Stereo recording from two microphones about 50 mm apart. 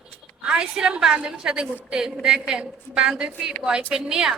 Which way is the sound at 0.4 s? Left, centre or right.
Centre.